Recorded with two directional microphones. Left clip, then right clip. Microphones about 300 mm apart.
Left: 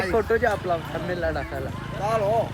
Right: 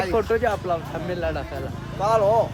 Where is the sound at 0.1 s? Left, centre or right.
Centre.